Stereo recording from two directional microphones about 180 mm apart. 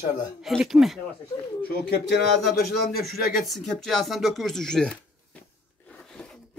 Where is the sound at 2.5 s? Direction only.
60° left (ahead or behind).